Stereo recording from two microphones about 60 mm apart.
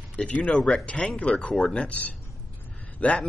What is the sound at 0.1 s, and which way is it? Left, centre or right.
Speech, left.